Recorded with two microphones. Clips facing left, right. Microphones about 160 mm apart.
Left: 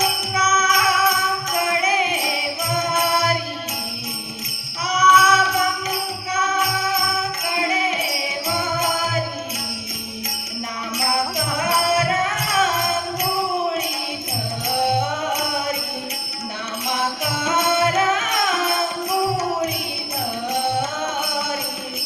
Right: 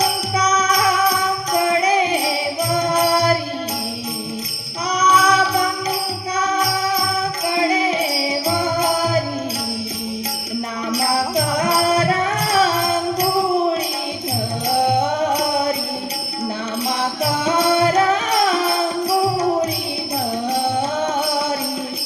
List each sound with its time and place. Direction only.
0.0 s music: 35° right (ahead or behind)
4.9 s music: 35° right (ahead or behind)
10.9 s music: 35° right (ahead or behind)
15.2 s music: 35° right (ahead or behind)
17.0 s music: 35° right (ahead or behind)